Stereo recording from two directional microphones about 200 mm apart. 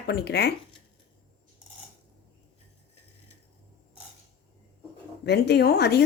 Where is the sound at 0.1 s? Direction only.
55° left (ahead or behind).